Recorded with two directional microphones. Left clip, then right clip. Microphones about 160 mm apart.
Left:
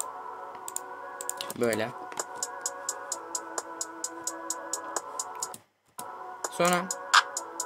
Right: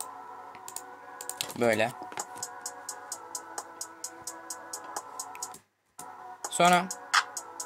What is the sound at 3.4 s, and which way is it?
Music, 30° left (ahead or behind).